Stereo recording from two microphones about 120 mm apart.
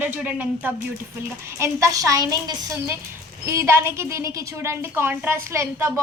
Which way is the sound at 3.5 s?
20° right (ahead or behind).